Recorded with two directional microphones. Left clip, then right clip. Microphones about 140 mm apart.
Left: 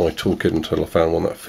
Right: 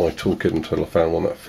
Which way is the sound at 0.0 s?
20° left (ahead or behind).